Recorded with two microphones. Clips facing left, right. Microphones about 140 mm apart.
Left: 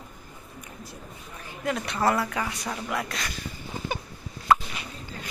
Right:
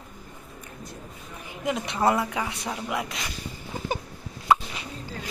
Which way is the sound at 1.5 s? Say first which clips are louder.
Right 1 dB; 15° right (ahead or behind).